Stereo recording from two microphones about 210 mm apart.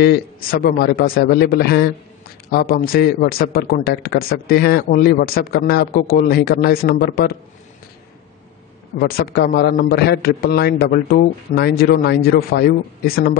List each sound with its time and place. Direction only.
0.0 s speech: 50° left (ahead or behind)
9.0 s speech: 45° left (ahead or behind)